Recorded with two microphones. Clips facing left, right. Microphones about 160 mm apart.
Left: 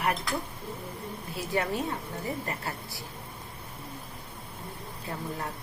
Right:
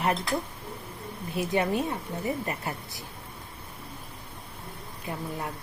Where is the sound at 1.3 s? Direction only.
20° right (ahead or behind).